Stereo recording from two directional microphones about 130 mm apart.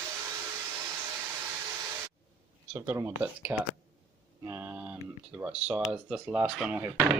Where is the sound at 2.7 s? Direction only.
20° right (ahead or behind).